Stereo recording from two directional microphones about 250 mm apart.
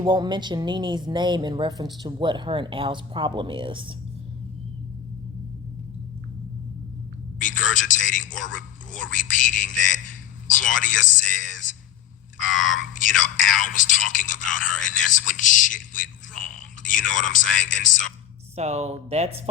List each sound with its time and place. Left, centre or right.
0.0 s speech: centre
7.3 s a sound: left
9.1 s a man's voice: left
18.5 s speech: right